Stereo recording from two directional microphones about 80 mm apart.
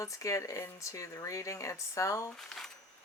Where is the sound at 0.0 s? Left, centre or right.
Left.